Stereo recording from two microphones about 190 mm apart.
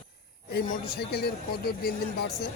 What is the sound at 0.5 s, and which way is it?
Speech, 55° left (ahead or behind).